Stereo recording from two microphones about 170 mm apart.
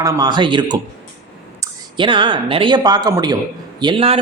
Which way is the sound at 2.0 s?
30° right (ahead or behind).